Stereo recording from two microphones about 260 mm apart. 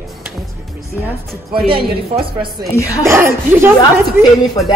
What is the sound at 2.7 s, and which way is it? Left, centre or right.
Speech, centre.